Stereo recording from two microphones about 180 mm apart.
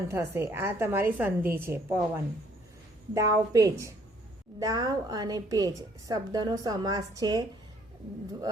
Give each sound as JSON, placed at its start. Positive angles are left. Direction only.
{"t": 0.1, "sound": "a woman's voice", "side_deg": -15}